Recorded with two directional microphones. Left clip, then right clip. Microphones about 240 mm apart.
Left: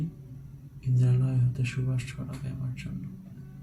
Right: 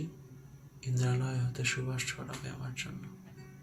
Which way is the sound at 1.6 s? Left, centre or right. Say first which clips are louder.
Right 3 dB; centre.